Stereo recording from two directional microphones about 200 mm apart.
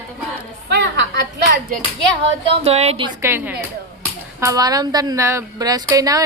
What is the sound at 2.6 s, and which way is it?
Speech, 30° right (ahead or behind).